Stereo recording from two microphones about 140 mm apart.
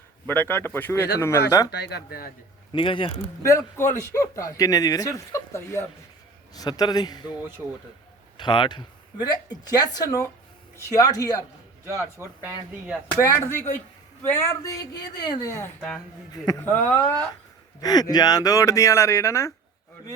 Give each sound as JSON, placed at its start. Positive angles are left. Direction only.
{"t": 0.3, "sound": "speech", "side_deg": 15}
{"t": 2.0, "sound": "a man's voice", "side_deg": 90}
{"t": 2.7, "sound": "speech", "side_deg": 35}
{"t": 3.4, "sound": "a man's voice", "side_deg": 20}
{"t": 8.4, "sound": "a man's voice", "side_deg": 35}
{"t": 11.9, "sound": "speech", "side_deg": -20}
{"t": 13.1, "sound": "a man's voice", "side_deg": 20}
{"t": 16.6, "sound": "speech", "side_deg": 15}
{"t": 17.7, "sound": "a man's voice", "side_deg": 25}